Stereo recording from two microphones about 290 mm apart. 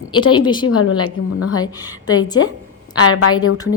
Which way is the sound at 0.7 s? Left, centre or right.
Left.